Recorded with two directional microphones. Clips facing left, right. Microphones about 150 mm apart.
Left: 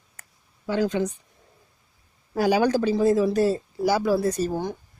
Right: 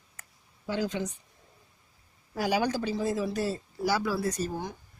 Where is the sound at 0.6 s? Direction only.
60° left (ahead or behind).